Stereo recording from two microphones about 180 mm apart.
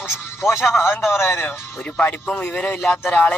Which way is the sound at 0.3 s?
15° left (ahead or behind).